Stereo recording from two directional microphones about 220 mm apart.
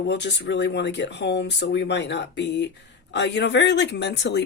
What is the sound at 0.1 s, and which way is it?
Speech, 50° left (ahead or behind).